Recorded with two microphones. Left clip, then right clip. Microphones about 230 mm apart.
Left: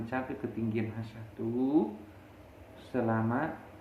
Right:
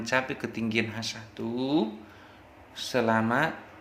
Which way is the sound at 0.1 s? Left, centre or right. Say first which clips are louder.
Right 8 dB; right.